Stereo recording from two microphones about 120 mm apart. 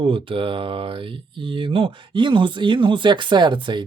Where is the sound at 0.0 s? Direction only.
45° right (ahead or behind).